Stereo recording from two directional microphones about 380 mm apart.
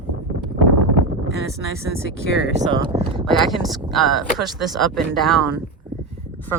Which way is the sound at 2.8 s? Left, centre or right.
Centre.